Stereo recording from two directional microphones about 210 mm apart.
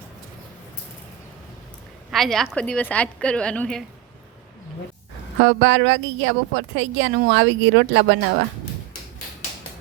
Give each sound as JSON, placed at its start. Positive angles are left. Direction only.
{"t": 2.0, "sound": "a woman's voice", "side_deg": 0}
{"t": 5.5, "sound": "a woman's voice", "side_deg": -60}